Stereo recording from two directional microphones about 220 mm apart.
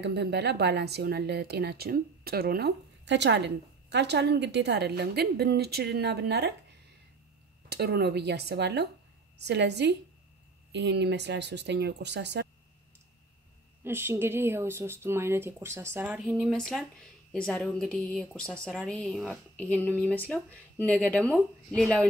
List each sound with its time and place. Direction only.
0.0 s speech: 50° right (ahead or behind)
7.7 s speech: 45° right (ahead or behind)
13.8 s speech: 10° right (ahead or behind); by 22.0 s 5° left (ahead or behind)